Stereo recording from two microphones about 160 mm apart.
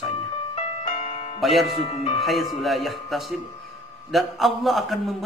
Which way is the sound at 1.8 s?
35° left (ahead or behind).